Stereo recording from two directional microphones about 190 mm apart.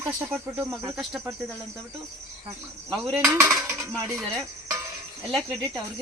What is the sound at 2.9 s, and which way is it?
Speech, centre (ahead or behind).